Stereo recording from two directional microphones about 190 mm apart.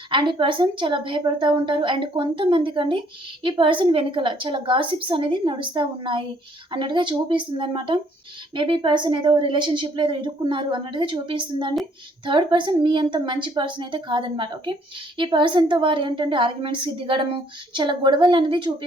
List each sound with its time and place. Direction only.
0.1 s a woman's voice: 25° right (ahead or behind)